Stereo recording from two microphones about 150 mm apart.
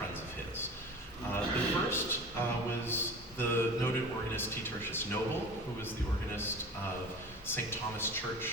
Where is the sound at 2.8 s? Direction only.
15° left (ahead or behind).